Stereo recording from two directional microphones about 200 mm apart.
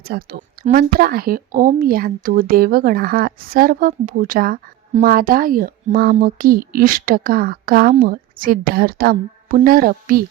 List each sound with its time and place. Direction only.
0.0 s a woman's voice: 50° right (ahead or behind)